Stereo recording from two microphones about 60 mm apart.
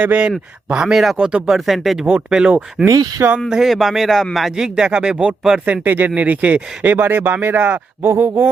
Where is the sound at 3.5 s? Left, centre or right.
Centre.